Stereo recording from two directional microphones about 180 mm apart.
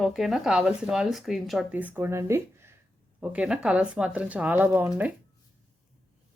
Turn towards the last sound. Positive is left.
turn(degrees=-10)  # may be behind; listen again after turning